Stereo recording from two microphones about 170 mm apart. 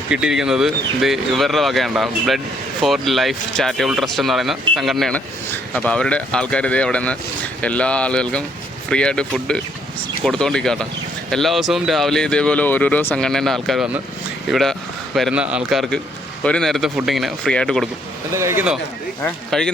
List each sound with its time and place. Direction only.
0.1 s speech: 5° right (ahead or behind)
18.3 s speech: 15° right (ahead or behind)
19.2 s speech: 5° left (ahead or behind)